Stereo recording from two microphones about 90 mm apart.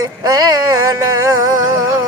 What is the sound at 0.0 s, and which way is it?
Music, 40° right (ahead or behind).